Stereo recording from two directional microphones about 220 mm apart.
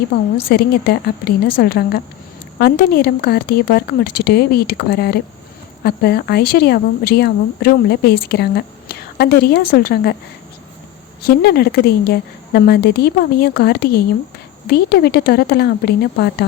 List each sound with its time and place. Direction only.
0.5 s speech: 45° left (ahead or behind)
11.3 s speech: 45° left (ahead or behind)